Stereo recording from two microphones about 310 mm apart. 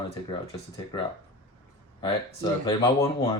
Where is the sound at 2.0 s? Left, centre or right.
Centre.